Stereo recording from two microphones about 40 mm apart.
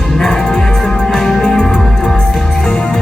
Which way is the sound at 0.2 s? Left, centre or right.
Left.